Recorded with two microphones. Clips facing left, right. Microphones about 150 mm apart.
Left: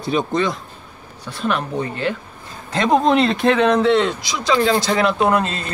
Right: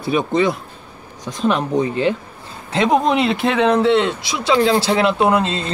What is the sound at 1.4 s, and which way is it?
Speech, 35° right (ahead or behind).